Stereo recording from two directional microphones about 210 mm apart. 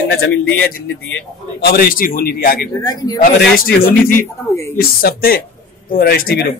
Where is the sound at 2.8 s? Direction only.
15° left (ahead or behind).